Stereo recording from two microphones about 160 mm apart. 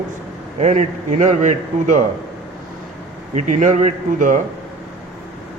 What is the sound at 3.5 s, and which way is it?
Speech, 45° right (ahead or behind).